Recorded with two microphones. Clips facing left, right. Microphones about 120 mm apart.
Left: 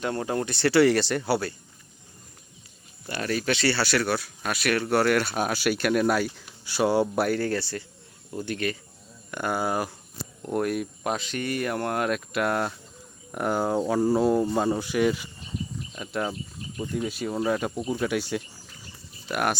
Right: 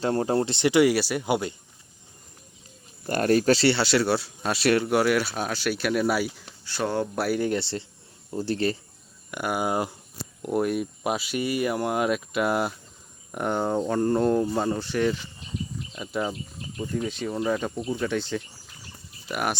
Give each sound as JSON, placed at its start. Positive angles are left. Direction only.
{"t": 0.0, "sound": "speech", "side_deg": -35}
{"t": 0.6, "sound": "speech", "side_deg": -15}
{"t": 3.1, "sound": "speech", "side_deg": -45}
{"t": 3.7, "sound": "speech", "side_deg": -25}
{"t": 4.9, "sound": "speech", "side_deg": -5}
{"t": 5.3, "sound": "speech", "side_deg": 5}
{"t": 6.7, "sound": "speech", "side_deg": 10}
{"t": 7.3, "sound": "speech", "side_deg": -15}
{"t": 9.3, "sound": "speech", "side_deg": -10}
{"t": 10.4, "sound": "speech", "side_deg": -5}